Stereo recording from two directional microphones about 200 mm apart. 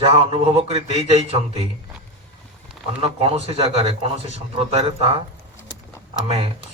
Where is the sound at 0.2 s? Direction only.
30° right (ahead or behind).